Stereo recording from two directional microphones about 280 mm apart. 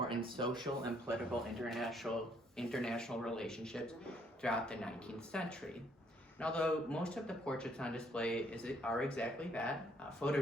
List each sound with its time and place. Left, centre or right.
0.3 s speech: centre
1.5 s speech: centre